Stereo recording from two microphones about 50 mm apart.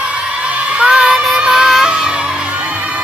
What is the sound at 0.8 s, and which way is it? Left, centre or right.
Music, right.